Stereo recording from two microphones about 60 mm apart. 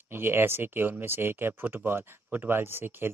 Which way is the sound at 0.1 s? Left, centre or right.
Right.